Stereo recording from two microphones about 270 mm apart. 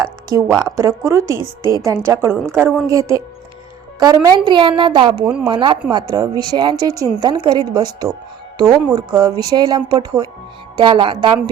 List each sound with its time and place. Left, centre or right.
0.6 s speech: centre
5.2 s speech: centre
5.5 s speech: centre
8.6 s speech: centre
9.1 s speech: centre